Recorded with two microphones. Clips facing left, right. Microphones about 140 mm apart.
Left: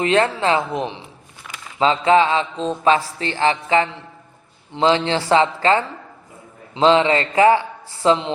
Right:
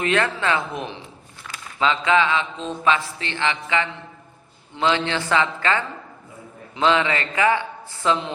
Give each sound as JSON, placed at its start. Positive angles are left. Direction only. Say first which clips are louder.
{"t": 0.0, "sound": "a man's voice", "louder": "left 4 dB", "side_deg": 25}